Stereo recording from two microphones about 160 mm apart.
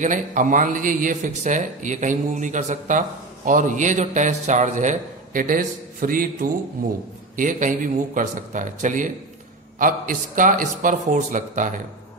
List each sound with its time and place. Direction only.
0.0 s speech: 55° right (ahead or behind)